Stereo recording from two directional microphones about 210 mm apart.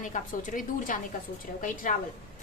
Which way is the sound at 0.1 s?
40° left (ahead or behind).